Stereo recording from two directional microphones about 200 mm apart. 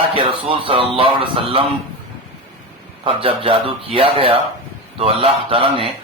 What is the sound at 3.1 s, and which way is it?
Speech, 25° right (ahead or behind).